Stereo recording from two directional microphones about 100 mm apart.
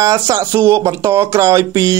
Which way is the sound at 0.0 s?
40° right (ahead or behind).